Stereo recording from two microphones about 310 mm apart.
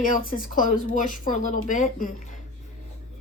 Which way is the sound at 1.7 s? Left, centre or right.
Left.